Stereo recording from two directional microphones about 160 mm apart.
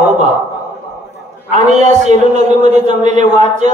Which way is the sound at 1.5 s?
45° right (ahead or behind).